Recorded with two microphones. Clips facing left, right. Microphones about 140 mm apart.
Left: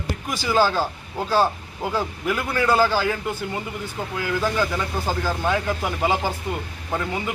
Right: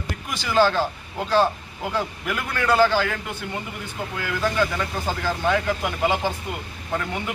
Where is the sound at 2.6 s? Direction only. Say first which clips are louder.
Right 1 dB; 10° left (ahead or behind).